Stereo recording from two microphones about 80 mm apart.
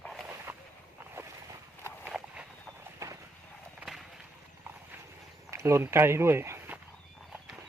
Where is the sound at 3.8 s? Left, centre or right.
Centre.